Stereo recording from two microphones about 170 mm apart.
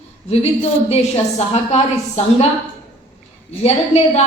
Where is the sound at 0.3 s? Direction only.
40° left (ahead or behind).